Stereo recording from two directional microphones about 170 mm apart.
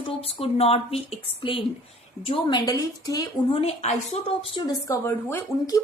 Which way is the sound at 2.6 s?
20° left (ahead or behind).